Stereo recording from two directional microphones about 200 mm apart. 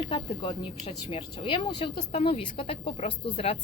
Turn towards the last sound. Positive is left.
turn(degrees=25)  # may be behind; listen again after turning